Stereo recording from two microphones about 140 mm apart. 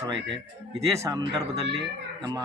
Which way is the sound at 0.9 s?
25° right (ahead or behind).